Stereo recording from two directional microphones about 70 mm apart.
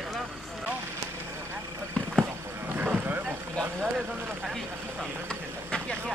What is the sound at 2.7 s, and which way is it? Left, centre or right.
Vehicle, right.